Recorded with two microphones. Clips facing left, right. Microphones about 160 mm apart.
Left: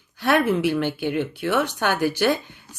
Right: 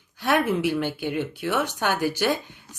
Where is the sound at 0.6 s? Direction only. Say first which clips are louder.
Left 3 dB; 10° right (ahead or behind).